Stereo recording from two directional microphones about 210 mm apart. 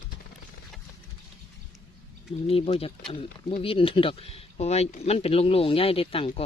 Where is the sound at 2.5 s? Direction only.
25° left (ahead or behind).